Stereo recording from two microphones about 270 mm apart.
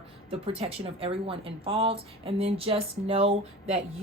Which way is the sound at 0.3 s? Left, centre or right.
Right.